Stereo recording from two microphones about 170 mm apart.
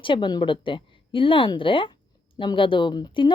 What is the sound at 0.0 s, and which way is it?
Speech, 30° left (ahead or behind).